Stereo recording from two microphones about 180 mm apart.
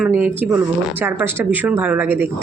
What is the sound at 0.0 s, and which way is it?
A woman's voice, 10° right (ahead or behind).